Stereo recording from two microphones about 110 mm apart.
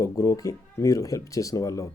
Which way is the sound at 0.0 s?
30° left (ahead or behind).